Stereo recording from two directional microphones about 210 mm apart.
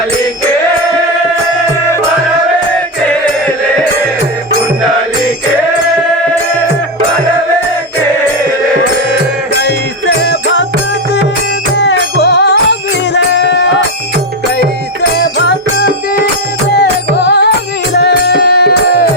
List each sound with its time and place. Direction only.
9.6 s music: 55° left (ahead or behind)
11.8 s music: 55° left (ahead or behind)
16.8 s music: 55° left (ahead or behind)